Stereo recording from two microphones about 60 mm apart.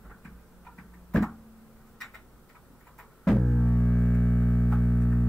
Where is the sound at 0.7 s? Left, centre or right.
Centre.